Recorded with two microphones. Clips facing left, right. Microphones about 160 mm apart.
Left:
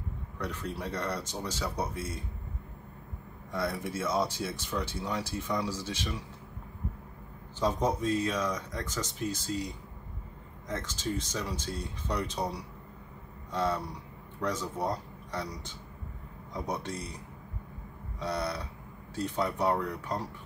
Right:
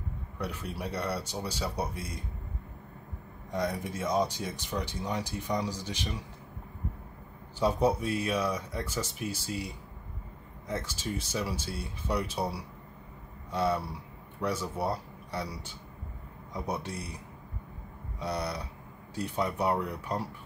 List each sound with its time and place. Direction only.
0.4 s speech: 10° right (ahead or behind)
3.5 s speech: 15° right (ahead or behind)
7.5 s speech: 10° right (ahead or behind)
18.2 s speech: 10° right (ahead or behind)